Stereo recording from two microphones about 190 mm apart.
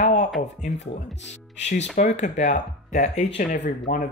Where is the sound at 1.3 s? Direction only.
35° left (ahead or behind).